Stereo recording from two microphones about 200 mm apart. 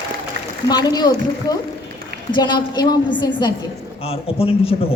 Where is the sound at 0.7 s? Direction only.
20° left (ahead or behind).